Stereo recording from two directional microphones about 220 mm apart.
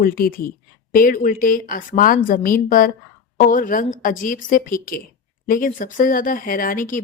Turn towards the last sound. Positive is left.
turn(degrees=35)  # may be behind; listen again after turning